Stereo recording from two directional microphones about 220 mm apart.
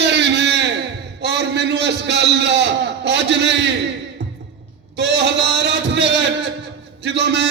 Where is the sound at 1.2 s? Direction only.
50° right (ahead or behind).